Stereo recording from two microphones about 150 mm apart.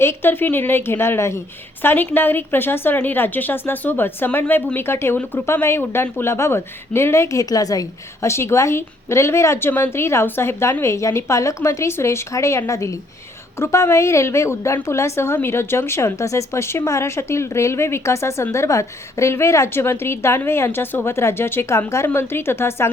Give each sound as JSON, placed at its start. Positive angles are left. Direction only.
{"t": 0.0, "sound": "a woman's voice", "side_deg": 15}